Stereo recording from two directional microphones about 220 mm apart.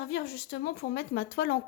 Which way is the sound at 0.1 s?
45° left (ahead or behind).